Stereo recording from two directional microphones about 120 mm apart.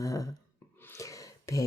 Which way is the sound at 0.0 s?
25° left (ahead or behind).